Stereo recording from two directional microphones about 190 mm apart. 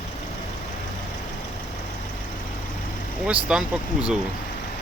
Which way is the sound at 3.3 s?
5° right (ahead or behind).